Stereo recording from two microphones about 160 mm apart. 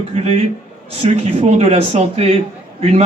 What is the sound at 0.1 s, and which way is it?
Speech, 40° right (ahead or behind).